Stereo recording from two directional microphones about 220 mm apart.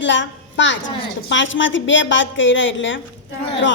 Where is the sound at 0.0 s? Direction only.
55° left (ahead or behind).